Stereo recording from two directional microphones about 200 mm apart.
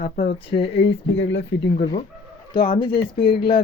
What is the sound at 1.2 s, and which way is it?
Speech, 65° left (ahead or behind).